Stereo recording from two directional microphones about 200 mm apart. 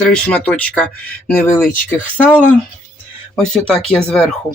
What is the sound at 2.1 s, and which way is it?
Speech, 10° left (ahead or behind).